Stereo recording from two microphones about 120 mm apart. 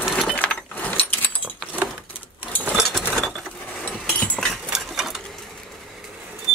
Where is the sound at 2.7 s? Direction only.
Centre (ahead or behind).